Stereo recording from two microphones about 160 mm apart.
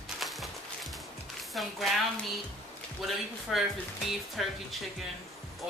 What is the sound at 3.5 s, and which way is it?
Speech, centre (ahead or behind).